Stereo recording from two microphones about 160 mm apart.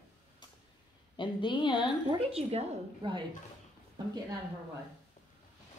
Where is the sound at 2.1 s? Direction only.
40° right (ahead or behind).